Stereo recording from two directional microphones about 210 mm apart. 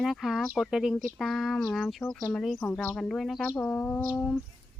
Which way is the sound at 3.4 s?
5° left (ahead or behind).